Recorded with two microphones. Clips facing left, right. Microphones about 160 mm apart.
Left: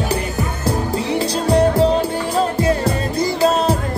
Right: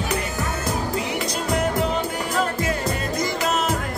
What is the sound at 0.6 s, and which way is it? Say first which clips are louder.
Music: left 7 dB; 30° left (ahead or behind).